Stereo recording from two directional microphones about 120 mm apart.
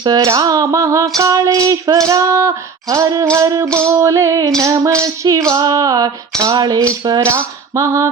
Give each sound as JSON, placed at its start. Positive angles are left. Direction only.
{"t": 0.0, "sound": "music", "side_deg": -35}
{"t": 6.4, "sound": "speech", "side_deg": -35}
{"t": 7.3, "sound": "music", "side_deg": -25}